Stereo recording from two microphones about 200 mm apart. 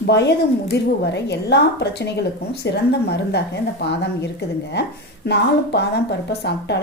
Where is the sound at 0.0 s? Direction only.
55° left (ahead or behind).